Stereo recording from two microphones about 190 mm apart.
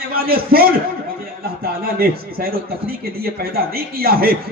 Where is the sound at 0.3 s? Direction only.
55° right (ahead or behind).